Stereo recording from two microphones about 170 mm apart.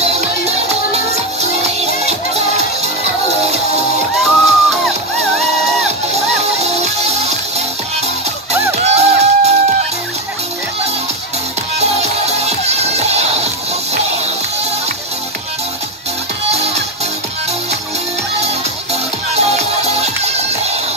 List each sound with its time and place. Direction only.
0.0 s music: 40° right (ahead or behind)
4.2 s music: centre (ahead or behind)
6.6 s music: 40° right (ahead or behind)
8.7 s music: 40° right (ahead or behind)
11.8 s music: 40° right (ahead or behind)
19.3 s music: 40° right (ahead or behind)